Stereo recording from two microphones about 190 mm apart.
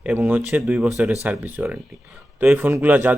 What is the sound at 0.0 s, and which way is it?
A man's voice, 10° right (ahead or behind).